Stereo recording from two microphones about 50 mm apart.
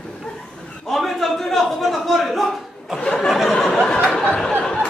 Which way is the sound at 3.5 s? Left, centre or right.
Centre.